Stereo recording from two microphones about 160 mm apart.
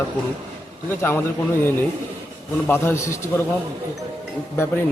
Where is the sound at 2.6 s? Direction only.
15° left (ahead or behind).